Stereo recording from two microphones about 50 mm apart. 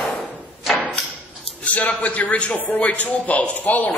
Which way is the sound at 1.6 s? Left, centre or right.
Left.